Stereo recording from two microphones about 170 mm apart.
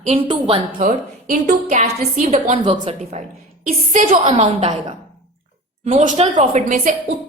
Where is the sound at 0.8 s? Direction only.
50° right (ahead or behind).